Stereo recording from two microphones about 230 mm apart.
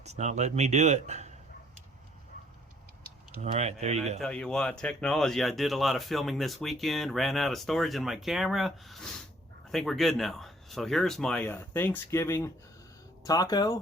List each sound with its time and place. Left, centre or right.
0.0 s speech: right
3.4 s speech: right
4.2 s speech: centre